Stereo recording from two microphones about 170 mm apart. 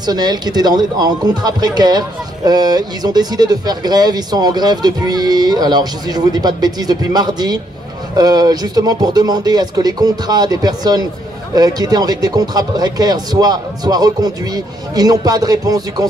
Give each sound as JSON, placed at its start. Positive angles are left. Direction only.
{"t": 0.0, "sound": "speech", "side_deg": -25}